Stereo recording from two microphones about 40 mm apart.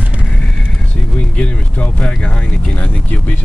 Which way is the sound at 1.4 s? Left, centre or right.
Left.